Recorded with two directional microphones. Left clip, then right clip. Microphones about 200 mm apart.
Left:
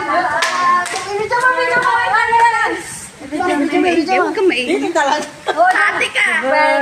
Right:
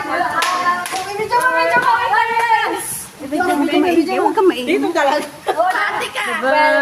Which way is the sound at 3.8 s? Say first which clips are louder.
Left 1 dB; 20° right (ahead or behind).